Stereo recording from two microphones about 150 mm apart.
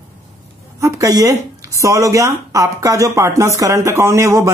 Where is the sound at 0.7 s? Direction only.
20° right (ahead or behind).